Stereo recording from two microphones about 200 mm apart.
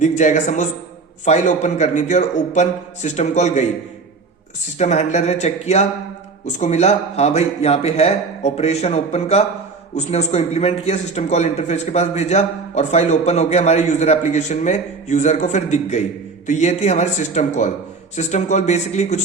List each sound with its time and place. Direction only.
0.2 s a man's voice: 40° left (ahead or behind)
4.8 s a man's voice: 35° left (ahead or behind)